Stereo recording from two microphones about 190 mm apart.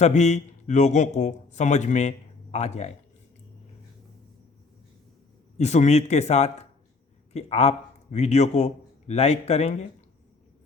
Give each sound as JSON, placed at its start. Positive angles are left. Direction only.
{"t": 0.0, "sound": "a man's voice", "side_deg": 35}
{"t": 5.5, "sound": "a man's voice", "side_deg": 35}